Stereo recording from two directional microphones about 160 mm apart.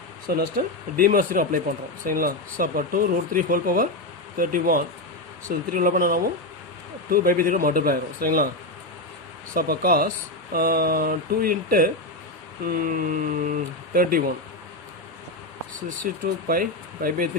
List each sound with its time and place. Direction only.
0.3 s speech: 70° right (ahead or behind)
9.6 s speech: 70° right (ahead or behind)
16.2 s speech: 65° right (ahead or behind)